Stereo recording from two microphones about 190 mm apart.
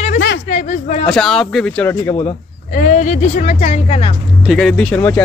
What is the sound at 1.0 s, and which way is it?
Speech, 5° left (ahead or behind).